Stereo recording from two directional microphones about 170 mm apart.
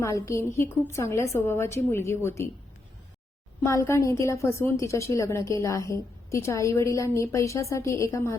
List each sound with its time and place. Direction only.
0.0 s a woman's voice: 15° left (ahead or behind)
3.6 s a woman's voice: 15° left (ahead or behind)